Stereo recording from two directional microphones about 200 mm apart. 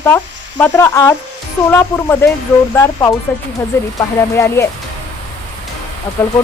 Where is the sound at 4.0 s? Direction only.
15° left (ahead or behind).